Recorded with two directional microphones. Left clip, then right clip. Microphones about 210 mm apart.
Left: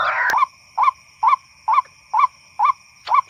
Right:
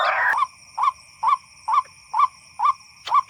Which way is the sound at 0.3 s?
20° left (ahead or behind).